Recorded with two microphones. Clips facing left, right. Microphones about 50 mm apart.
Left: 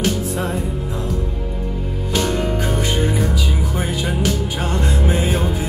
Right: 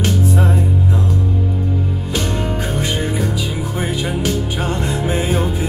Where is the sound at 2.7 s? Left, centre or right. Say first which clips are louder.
Even; left.